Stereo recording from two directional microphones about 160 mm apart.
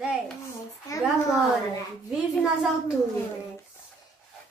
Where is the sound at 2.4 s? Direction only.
Centre (ahead or behind).